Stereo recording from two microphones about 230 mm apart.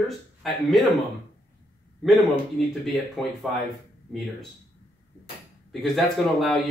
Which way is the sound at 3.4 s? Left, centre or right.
Centre.